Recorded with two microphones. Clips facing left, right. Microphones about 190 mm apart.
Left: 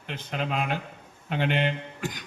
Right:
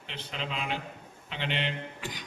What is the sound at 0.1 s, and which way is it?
A man's voice, 50° left (ahead or behind).